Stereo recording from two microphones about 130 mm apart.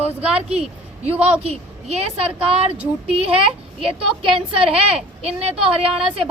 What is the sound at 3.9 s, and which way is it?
A woman's voice, 45° right (ahead or behind).